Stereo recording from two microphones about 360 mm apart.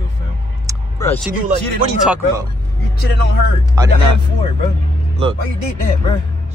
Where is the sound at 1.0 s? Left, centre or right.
Centre.